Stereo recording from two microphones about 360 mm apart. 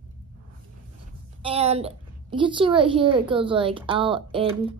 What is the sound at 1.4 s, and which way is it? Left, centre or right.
A woman's voice, centre.